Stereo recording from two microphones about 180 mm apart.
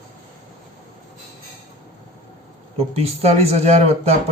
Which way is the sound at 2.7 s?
35° right (ahead or behind).